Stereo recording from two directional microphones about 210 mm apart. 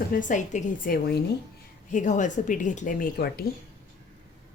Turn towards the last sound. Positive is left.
turn(degrees=45)  # may be behind; listen again after turning